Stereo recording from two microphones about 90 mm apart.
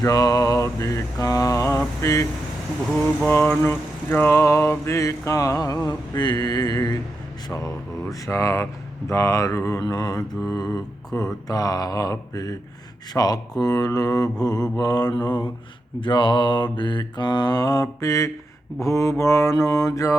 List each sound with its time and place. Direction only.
0.0 s mantra: 40° left (ahead or behind)
3.2 s mantra: 20° left (ahead or behind)
9.8 s mantra: 45° left (ahead or behind)
16.0 s a sound: 65° left (ahead or behind)
16.7 s mantra: 60° left (ahead or behind); by 20.1 s 40° left (ahead or behind)